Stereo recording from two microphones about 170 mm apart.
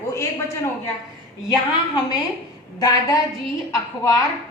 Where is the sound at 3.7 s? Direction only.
15° left (ahead or behind).